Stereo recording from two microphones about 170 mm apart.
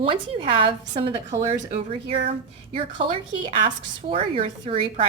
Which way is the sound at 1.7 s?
35° right (ahead or behind).